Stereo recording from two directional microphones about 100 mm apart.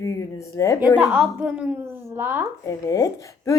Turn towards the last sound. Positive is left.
turn(degrees=35)  # may be behind; listen again after turning